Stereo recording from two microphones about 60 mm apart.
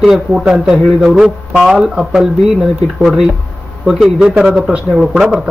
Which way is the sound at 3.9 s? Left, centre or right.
Centre.